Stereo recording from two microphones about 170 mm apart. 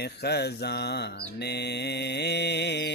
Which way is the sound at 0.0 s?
75° left (ahead or behind).